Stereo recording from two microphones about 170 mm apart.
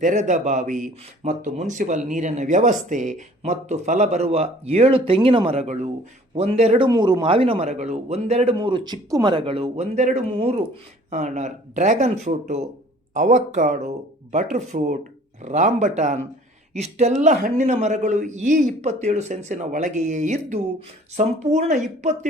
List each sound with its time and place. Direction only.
0.0 s speech: 45° right (ahead or behind)
8.5 s speech: 25° right (ahead or behind); by 21.8 s 40° right (ahead or behind)